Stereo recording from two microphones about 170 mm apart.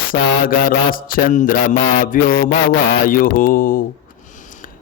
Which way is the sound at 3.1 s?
55° left (ahead or behind).